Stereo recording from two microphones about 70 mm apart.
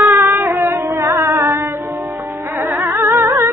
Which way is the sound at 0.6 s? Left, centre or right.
Right.